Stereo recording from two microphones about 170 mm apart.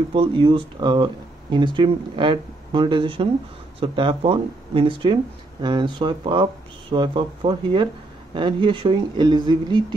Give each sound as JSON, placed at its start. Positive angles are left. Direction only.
{"t": 0.1, "sound": "speech", "side_deg": -30}